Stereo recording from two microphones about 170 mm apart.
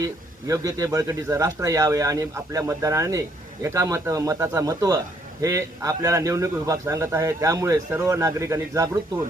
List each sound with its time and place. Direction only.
0.0 s a man's voice: 20° right (ahead or behind)